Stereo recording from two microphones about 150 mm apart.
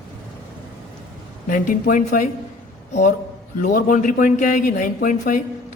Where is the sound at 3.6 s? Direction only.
65° left (ahead or behind).